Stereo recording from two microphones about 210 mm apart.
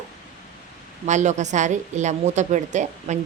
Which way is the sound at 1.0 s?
35° right (ahead or behind).